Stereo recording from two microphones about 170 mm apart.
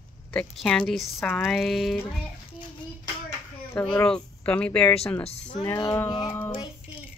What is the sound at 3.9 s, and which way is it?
Speech, 5° left (ahead or behind).